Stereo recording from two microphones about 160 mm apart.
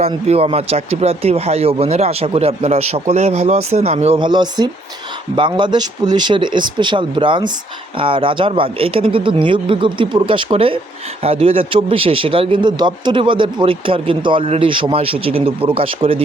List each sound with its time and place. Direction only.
0.3 s a man's voice: 40° right (ahead or behind)